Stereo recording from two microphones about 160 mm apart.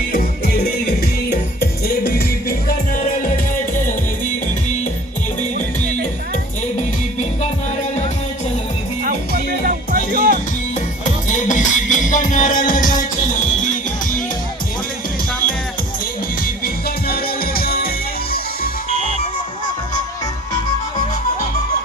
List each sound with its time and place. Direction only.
0.1 s music: 75° left (ahead or behind)
1.9 s music: 65° left (ahead or behind)
9.0 s music: 65° right (ahead or behind)
11.3 s music: 50° left (ahead or behind)
16.6 s music: 70° left (ahead or behind)
18.9 s music: 45° right (ahead or behind)